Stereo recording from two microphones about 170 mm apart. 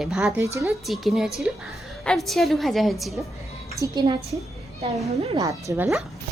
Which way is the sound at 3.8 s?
25° right (ahead or behind).